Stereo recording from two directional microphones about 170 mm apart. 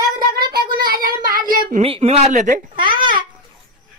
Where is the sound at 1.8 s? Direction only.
35° right (ahead or behind).